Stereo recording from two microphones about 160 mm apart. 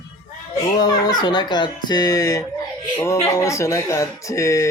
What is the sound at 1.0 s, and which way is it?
Speech, 25° left (ahead or behind).